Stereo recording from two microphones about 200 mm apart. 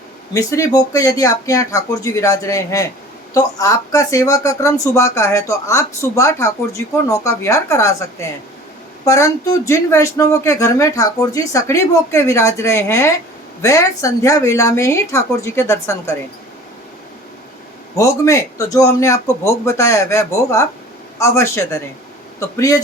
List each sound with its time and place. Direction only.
0.3 s speech: 15° left (ahead or behind)
9.0 s speech: 15° left (ahead or behind)
17.9 s speech: 15° left (ahead or behind)